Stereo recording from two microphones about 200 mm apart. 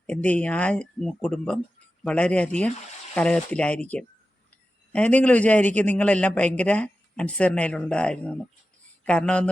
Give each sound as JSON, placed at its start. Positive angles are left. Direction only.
{"t": 0.0, "sound": "a man's voice", "side_deg": 5}